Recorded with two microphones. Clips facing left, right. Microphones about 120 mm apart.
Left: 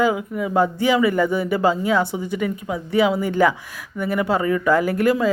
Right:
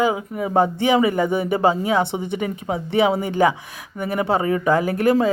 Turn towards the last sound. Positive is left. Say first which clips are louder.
# even
turn(degrees=-20)  # may be behind; listen again after turning